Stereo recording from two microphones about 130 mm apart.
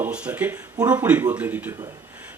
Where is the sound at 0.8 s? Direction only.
30° right (ahead or behind).